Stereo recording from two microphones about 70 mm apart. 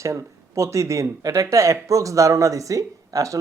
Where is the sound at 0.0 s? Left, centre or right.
Right.